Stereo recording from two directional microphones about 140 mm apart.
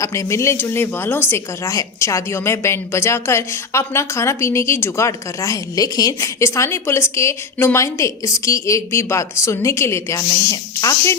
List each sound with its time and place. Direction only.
0.0 s speech: 20° left (ahead or behind)